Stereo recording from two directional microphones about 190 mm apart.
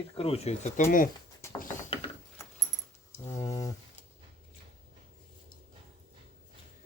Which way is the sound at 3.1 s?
15° left (ahead or behind).